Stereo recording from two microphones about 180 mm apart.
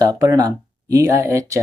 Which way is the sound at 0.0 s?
20° right (ahead or behind).